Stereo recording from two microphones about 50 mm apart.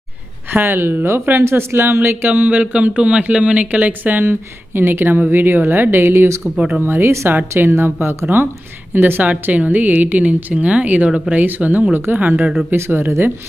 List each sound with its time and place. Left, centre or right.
0.5 s a woman's voice: right
4.3 s a woman's voice: right
6.6 s speech: right
6.8 s a woman's voice: right
9.2 s speech: right
12.7 s a woman's voice: right